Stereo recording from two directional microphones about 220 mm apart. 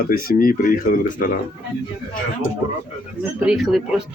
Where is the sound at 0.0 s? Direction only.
40° left (ahead or behind).